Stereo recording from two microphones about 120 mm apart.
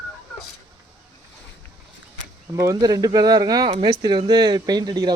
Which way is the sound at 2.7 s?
35° right (ahead or behind).